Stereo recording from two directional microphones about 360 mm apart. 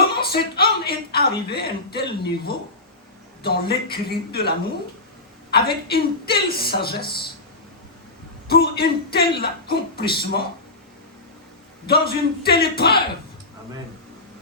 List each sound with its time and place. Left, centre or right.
0.2 s speech: left
8.4 s speech: left
11.9 s speech: left